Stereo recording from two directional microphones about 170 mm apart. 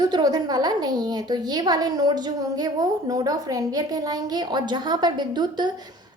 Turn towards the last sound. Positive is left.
turn(degrees=-25)  # may be behind; listen again after turning